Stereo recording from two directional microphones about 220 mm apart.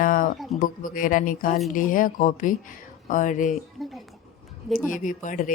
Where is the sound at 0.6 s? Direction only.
40° left (ahead or behind).